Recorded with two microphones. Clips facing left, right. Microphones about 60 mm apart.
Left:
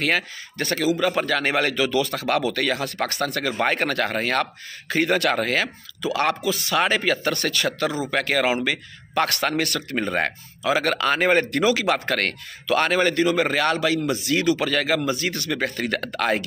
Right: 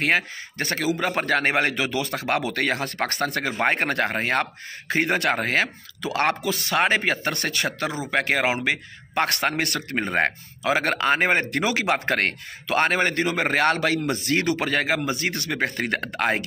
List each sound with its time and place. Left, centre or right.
0.0 s speech: right